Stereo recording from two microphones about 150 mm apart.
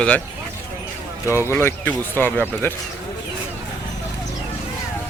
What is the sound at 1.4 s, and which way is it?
Speech, 15° left (ahead or behind).